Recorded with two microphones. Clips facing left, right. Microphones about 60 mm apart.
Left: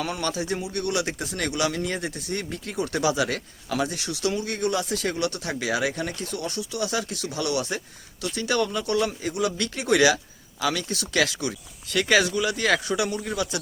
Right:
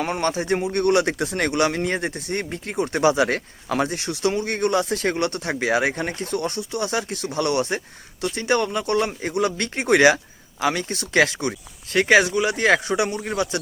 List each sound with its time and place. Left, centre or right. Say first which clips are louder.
0.0 s speech: right 5 dB; right